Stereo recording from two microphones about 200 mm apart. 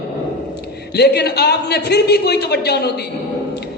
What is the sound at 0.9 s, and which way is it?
A man's voice, 55° left (ahead or behind).